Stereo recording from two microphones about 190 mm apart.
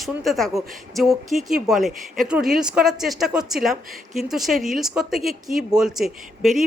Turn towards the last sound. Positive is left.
turn(degrees=0)  # may be behind; listen again after turning